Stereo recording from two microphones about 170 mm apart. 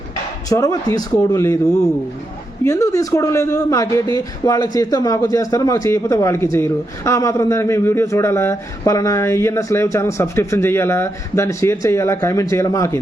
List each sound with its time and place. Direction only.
0.5 s speech: 20° left (ahead or behind)
2.6 s a man's voice: 20° left (ahead or behind)